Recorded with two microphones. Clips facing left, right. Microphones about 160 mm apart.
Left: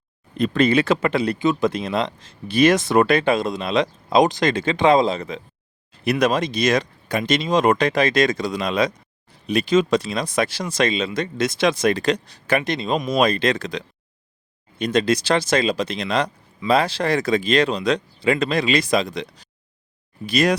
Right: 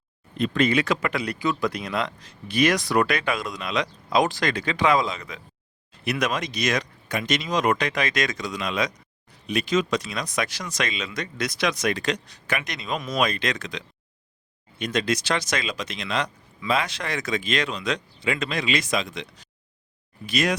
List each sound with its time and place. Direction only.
0.3 s speech: 35° left (ahead or behind)